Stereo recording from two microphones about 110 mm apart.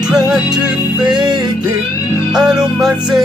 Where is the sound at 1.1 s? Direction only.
40° right (ahead or behind).